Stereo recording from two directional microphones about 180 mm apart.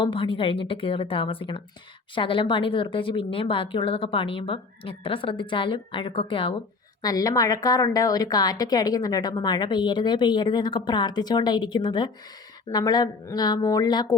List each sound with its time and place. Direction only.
0.0 s a woman's voice: 30° left (ahead or behind)